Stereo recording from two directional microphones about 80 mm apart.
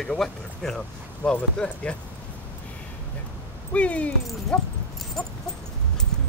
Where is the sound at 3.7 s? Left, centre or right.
Centre.